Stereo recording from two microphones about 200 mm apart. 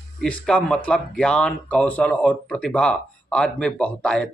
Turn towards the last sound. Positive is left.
turn(degrees=5)  # may be behind; listen again after turning